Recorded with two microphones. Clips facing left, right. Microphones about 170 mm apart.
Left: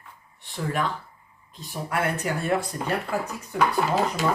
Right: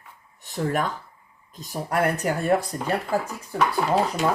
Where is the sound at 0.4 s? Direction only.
45° right (ahead or behind).